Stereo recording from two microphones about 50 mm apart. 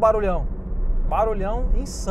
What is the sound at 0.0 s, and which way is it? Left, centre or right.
Speech, centre.